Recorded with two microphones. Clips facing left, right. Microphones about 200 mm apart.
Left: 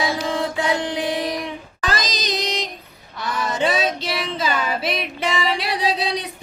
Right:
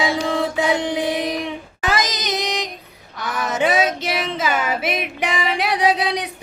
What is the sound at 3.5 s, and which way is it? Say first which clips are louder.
Female singing: right 3 dB; 20° right (ahead or behind).